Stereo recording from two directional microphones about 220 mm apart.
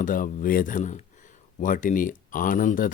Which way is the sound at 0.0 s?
40° left (ahead or behind).